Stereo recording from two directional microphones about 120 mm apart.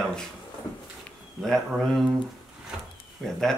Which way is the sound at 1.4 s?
Centre (ahead or behind).